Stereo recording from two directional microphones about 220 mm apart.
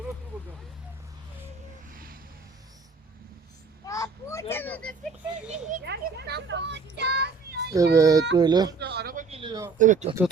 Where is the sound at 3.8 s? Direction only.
15° left (ahead or behind).